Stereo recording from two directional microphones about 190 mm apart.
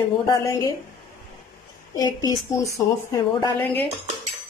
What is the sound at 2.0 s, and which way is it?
A woman's voice, 20° left (ahead or behind).